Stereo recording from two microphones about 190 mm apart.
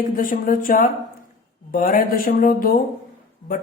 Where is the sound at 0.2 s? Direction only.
45° left (ahead or behind).